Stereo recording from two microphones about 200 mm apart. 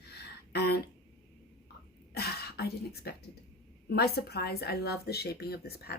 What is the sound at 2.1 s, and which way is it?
Speech, 55° left (ahead or behind).